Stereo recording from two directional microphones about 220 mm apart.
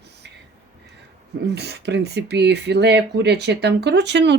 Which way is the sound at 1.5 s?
50° right (ahead or behind).